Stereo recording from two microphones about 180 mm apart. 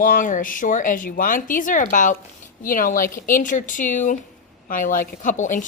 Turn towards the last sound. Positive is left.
turn(degrees=45)  # may be behind; listen again after turning